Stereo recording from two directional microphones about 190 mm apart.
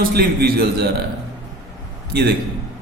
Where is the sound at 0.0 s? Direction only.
55° right (ahead or behind).